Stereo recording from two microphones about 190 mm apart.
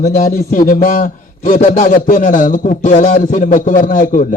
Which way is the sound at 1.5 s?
30° left (ahead or behind).